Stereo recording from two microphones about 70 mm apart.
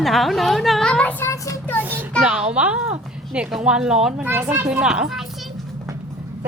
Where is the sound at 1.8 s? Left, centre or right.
Right.